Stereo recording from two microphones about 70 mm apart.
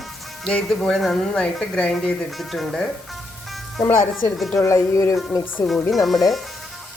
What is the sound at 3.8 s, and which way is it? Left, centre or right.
Speech, left.